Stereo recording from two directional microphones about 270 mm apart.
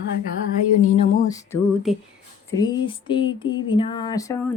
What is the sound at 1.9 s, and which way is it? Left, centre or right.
Speech, centre.